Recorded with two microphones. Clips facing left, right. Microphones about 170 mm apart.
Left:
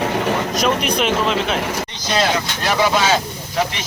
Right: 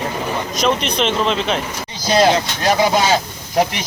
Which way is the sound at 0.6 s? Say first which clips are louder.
Right 4 dB; 5° left (ahead or behind).